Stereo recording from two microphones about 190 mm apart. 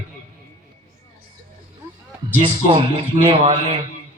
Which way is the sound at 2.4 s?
35° right (ahead or behind).